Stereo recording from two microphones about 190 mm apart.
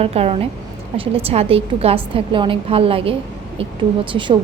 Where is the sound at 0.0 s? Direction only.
30° right (ahead or behind).